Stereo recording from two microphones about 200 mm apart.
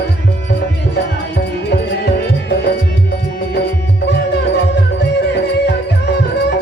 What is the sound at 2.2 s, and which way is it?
Music, 55° left (ahead or behind).